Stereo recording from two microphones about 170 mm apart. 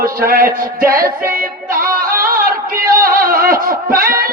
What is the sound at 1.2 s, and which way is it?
Music, 60° right (ahead or behind).